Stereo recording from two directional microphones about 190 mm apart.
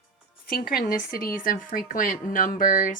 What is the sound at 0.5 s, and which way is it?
Speech, 50° left (ahead or behind).